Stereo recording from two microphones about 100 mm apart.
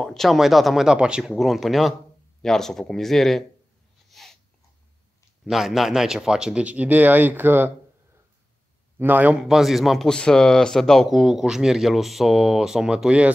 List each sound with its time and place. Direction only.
0.0 s speech: 5° left (ahead or behind)
4.1 s sneeze: centre (ahead or behind)
5.4 s speech: centre (ahead or behind); by 7.7 s 20° right (ahead or behind)
8.9 s speech: 20° right (ahead or behind)
9.4 s speech: centre (ahead or behind)